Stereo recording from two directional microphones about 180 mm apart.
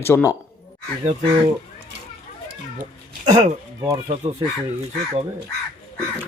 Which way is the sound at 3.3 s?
20° right (ahead or behind).